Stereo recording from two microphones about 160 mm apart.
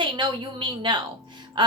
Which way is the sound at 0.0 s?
30° right (ahead or behind).